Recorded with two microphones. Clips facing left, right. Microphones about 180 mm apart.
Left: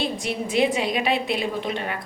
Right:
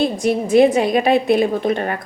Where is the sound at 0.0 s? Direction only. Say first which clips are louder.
Right 9 dB; 45° right (ahead or behind).